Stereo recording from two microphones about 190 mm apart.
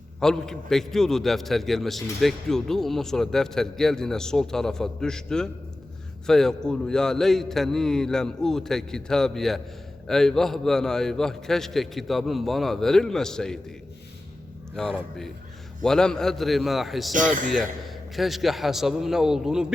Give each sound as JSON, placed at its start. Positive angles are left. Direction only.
{"t": 0.2, "sound": "a man's voice", "side_deg": 5}
{"t": 14.8, "sound": "a man's voice", "side_deg": 5}
{"t": 17.2, "sound": "a man's voice", "side_deg": -45}
{"t": 17.5, "sound": "a man's voice", "side_deg": 0}